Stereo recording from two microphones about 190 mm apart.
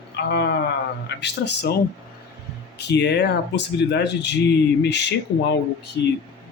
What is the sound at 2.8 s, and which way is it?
Speech, 60° left (ahead or behind).